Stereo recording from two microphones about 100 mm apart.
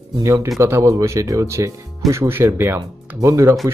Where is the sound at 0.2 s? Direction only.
30° right (ahead or behind).